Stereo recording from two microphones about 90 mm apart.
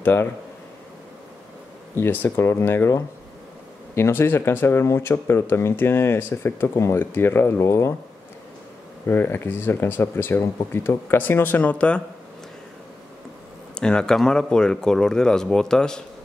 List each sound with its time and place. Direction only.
0.0 s speech: 25° left (ahead or behind)
2.0 s speech: 20° left (ahead or behind)
9.0 s speech: 25° left (ahead or behind)
13.7 s speech: 10° left (ahead or behind)